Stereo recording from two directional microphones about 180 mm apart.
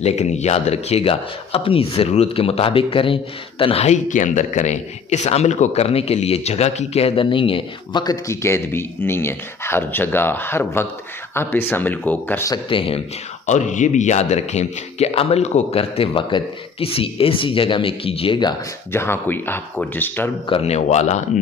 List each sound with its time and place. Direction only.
0.0 s speech: 40° left (ahead or behind); by 12.5 s 10° left (ahead or behind)
12.6 s speech: 30° left (ahead or behind)
13.5 s speech: 40° left (ahead or behind)
18.9 s speech: 15° left (ahead or behind)
20.4 s speech: 35° left (ahead or behind)